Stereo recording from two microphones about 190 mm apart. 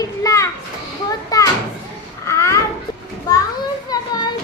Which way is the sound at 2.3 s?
15° left (ahead or behind).